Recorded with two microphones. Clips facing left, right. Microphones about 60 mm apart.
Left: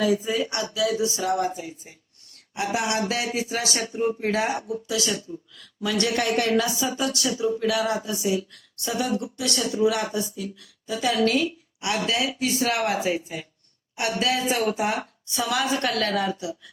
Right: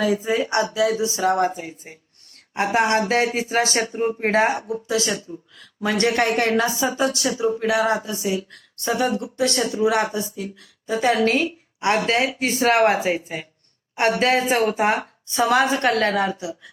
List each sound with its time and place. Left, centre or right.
0.0 s speech: right
16.4 s speech: right